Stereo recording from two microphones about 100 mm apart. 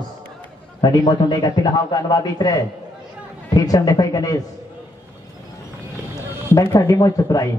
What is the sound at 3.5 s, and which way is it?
Speech, 35° left (ahead or behind).